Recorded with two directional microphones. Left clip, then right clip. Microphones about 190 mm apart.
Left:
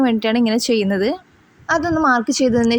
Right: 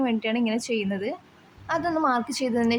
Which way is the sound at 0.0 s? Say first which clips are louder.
Left 8 dB; 30° left (ahead or behind).